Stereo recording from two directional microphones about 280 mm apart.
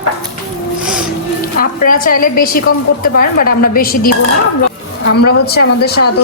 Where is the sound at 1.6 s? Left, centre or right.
Left.